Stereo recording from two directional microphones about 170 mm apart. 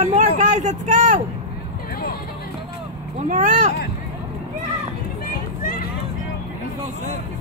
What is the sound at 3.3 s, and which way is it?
Speech, 45° right (ahead or behind).